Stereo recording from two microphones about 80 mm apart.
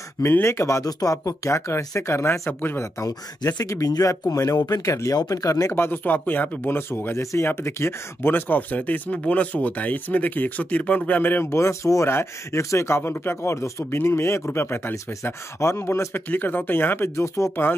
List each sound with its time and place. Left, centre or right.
0.2 s speech: left
3.5 s speech: left
5.7 s speech: left
11.5 s speech: left
16.3 s speech: left